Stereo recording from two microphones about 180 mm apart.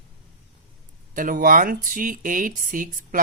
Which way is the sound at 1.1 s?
50° right (ahead or behind).